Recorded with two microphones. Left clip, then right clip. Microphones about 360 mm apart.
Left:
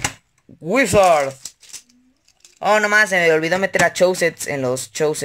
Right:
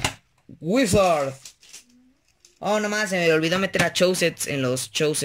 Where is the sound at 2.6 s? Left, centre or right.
Left.